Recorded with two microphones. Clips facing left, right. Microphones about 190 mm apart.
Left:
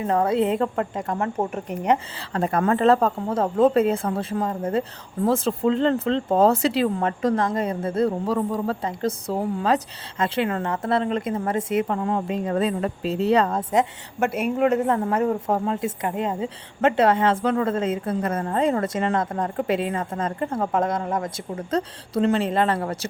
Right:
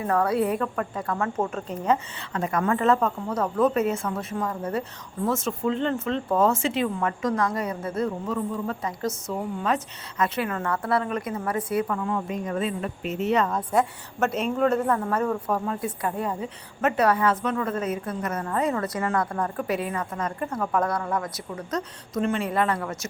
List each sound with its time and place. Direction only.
0.0 s a woman's voice: 20° left (ahead or behind)
2.3 s a woman's voice: 35° left (ahead or behind)
11.9 s speech: 35° left (ahead or behind)
14.2 s a woman's voice: 10° left (ahead or behind); by 23.0 s 30° left (ahead or behind)